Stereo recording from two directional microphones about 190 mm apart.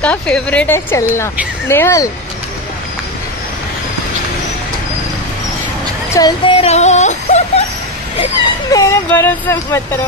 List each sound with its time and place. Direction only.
0.0 s speech: 5° left (ahead or behind)
6.1 s music: 20° left (ahead or behind)
6.6 s a sound: 35° left (ahead or behind)
8.7 s speech: 15° left (ahead or behind)